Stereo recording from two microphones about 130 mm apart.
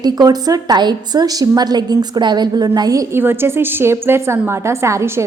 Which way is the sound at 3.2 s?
15° right (ahead or behind).